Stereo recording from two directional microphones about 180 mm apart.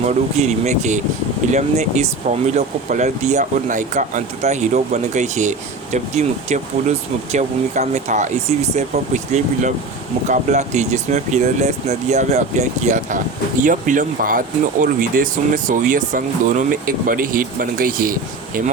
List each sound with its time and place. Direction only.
0.4 s speech: 40° right (ahead or behind)